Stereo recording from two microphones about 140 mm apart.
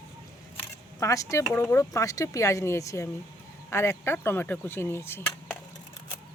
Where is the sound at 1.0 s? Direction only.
25° left (ahead or behind).